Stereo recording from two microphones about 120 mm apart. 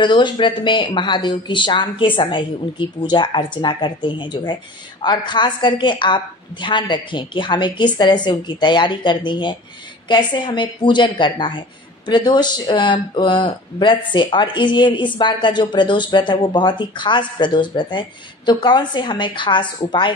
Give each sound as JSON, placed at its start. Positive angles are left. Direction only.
{"t": 0.0, "sound": "speech", "side_deg": 40}